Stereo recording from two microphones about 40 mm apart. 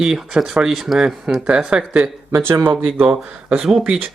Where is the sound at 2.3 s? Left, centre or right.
Right.